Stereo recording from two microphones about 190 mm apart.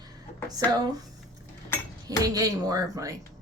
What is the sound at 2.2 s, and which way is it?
Speech, 20° right (ahead or behind).